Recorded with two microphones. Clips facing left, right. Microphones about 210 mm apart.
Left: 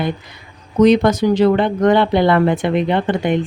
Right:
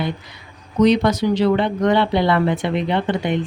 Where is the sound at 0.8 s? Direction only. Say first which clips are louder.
Left 3 dB; 50° left (ahead or behind).